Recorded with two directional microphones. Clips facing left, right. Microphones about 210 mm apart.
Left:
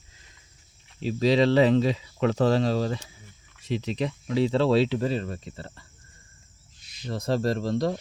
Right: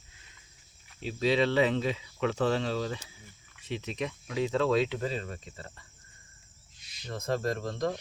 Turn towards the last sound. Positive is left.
turn(degrees=35)  # may be behind; listen again after turning